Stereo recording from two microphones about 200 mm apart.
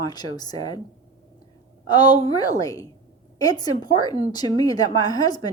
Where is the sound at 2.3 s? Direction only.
20° left (ahead or behind).